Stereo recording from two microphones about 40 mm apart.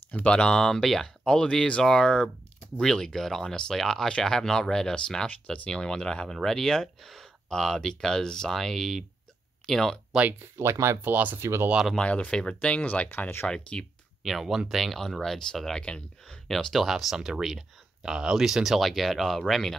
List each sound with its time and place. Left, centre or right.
0.1 s speech: left
0.7 s speech: centre
1.2 s speech: left
10.4 s speech: right
12.0 s speech: left
13.7 s speech: left
14.2 s speech: centre
15.0 s speech: centre
15.8 s speech: left
16.4 s speech: centre
16.8 s speech: centre